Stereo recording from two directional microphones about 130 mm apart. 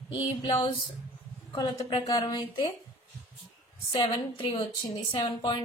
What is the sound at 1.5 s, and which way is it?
A woman's voice, 35° left (ahead or behind).